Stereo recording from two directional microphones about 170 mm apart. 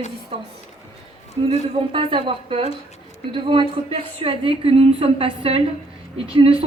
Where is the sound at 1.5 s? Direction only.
35° right (ahead or behind).